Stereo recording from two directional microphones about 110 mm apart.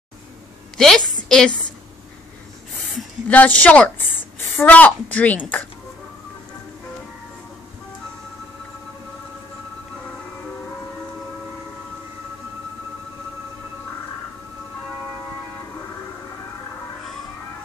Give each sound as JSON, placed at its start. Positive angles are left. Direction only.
{"t": 0.7, "sound": "a woman's voice", "side_deg": 5}
{"t": 3.3, "sound": "a woman's voice", "side_deg": 15}